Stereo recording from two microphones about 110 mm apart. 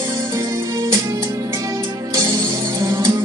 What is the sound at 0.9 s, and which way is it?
Music, 30° right (ahead or behind).